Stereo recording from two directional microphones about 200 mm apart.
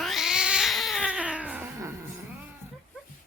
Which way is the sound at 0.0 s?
Centre (ahead or behind).